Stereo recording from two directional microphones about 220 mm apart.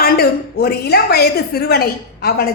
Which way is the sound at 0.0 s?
45° left (ahead or behind).